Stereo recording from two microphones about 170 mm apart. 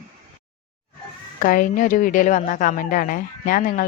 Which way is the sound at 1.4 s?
55° left (ahead or behind).